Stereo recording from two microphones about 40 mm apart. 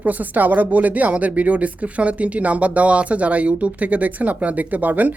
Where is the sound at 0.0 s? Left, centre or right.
Right.